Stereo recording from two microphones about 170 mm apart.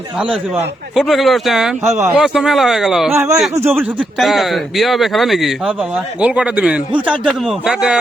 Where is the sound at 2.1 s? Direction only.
5° right (ahead or behind).